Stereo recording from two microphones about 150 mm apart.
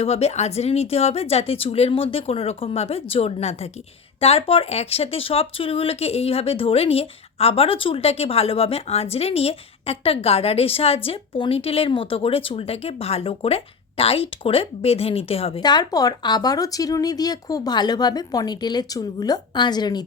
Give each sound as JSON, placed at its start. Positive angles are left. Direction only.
{"t": 0.0, "sound": "a woman's voice", "side_deg": 45}